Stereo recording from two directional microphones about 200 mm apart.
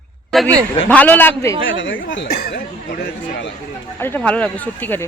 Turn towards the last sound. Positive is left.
turn(degrees=10)  # may be behind; listen again after turning